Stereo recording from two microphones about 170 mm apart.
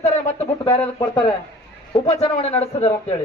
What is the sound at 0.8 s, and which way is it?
Speech, 10° left (ahead or behind).